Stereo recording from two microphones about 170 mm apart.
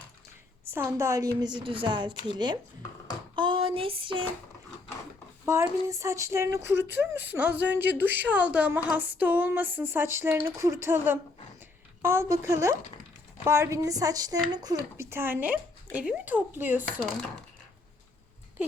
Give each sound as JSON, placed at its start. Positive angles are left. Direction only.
{"t": 0.7, "sound": "speech", "side_deg": -15}
{"t": 3.3, "sound": "a sound", "side_deg": -30}
{"t": 5.5, "sound": "speech", "side_deg": -15}